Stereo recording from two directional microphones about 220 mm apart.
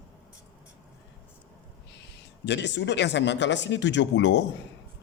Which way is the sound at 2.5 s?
55° left (ahead or behind).